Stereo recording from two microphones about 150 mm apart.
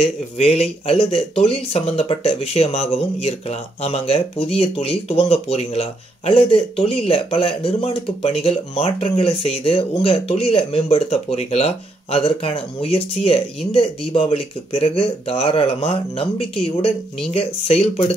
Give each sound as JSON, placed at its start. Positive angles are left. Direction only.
{"t": 0.0, "sound": "speech", "side_deg": 45}